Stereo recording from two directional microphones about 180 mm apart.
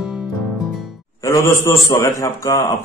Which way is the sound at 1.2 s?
15° left (ahead or behind).